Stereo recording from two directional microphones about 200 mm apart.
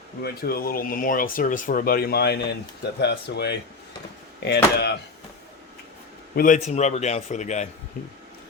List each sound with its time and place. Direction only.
0.2 s speech: 50° left (ahead or behind)
6.3 s a man's voice: 40° left (ahead or behind)